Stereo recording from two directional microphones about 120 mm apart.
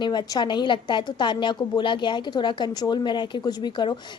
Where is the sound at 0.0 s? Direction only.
35° left (ahead or behind).